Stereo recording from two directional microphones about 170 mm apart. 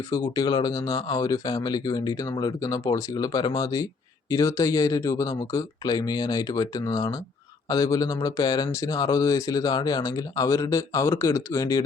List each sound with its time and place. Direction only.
0.1 s speech: 20° left (ahead or behind)